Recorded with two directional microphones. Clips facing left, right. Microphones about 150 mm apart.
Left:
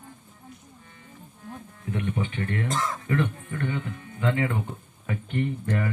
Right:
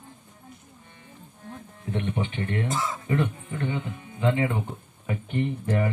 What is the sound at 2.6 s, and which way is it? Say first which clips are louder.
Speech: even; 10° right (ahead or behind).